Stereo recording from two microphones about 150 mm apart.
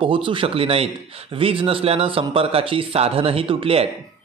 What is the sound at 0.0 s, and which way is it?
A man's voice, 35° right (ahead or behind).